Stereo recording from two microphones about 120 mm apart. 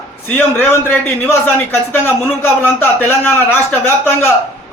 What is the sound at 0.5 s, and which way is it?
A man's voice, 15° left (ahead or behind).